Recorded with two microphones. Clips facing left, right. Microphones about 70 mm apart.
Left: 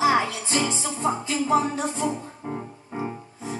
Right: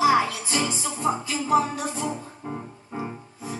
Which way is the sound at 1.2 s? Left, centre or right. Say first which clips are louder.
Left 1 dB; left.